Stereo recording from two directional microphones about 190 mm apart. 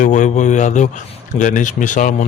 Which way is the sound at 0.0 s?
40° left (ahead or behind).